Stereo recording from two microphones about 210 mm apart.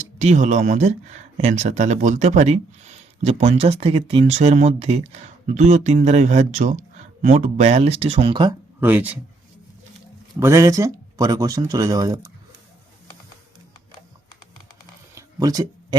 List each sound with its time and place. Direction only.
0.0 s speech: 35° right (ahead or behind)
8.8 s speech: 10° right (ahead or behind)
10.4 s speech: 15° right (ahead or behind)
15.1 s a sound: 15° right (ahead or behind)